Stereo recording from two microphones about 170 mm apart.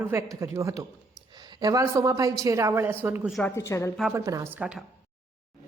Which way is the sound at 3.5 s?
15° left (ahead or behind).